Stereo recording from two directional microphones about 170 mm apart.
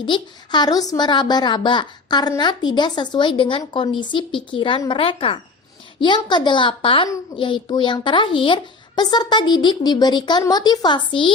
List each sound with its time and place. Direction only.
0.0 s a woman's voice: 25° left (ahead or behind)